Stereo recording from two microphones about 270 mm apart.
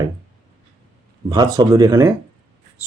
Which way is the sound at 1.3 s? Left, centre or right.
Centre.